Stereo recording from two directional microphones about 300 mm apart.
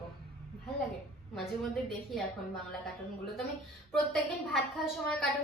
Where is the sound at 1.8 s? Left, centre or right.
Centre.